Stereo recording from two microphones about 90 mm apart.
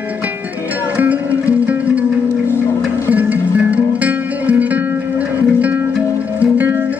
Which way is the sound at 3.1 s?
15° right (ahead or behind).